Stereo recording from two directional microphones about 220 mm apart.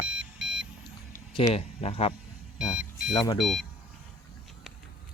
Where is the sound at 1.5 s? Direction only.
25° left (ahead or behind).